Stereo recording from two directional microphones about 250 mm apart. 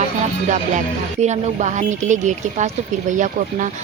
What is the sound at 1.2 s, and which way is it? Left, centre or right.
Speech, right.